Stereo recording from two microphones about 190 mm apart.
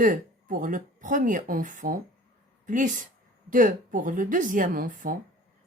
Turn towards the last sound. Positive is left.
turn(degrees=-45)  # may be behind; listen again after turning